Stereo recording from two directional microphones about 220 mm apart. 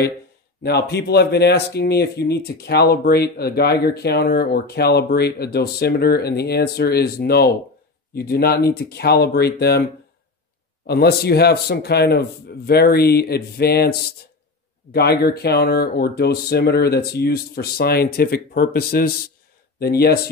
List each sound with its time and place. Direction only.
0.6 s speech: 50° left (ahead or behind)
10.9 s speech: 45° left (ahead or behind)